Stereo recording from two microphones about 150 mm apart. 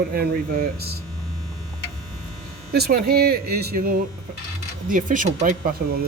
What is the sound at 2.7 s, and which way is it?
Speech, 90° right.